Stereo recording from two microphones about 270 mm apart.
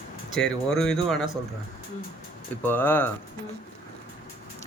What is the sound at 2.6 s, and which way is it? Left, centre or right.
Speech, centre.